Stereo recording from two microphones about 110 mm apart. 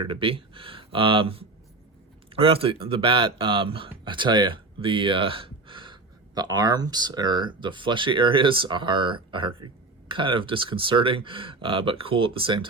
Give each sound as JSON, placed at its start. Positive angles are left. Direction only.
{"t": 0.0, "sound": "speech", "side_deg": -55}